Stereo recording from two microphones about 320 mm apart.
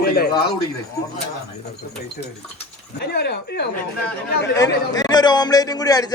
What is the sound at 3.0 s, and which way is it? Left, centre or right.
Speech, left.